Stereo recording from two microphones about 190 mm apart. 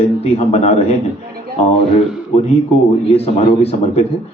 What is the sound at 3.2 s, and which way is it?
Speech, 30° left (ahead or behind).